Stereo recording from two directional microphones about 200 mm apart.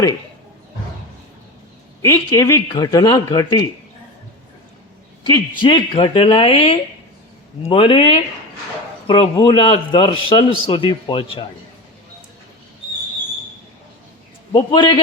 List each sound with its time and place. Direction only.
2.0 s a man's voice: 15° left (ahead or behind)
5.3 s a man's voice: 25° left (ahead or behind)
14.5 s a man's voice: 25° left (ahead or behind)